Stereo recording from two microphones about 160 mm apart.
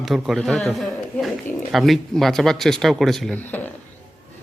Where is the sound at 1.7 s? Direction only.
Centre (ahead or behind).